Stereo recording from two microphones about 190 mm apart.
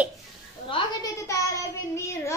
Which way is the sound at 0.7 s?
25° left (ahead or behind).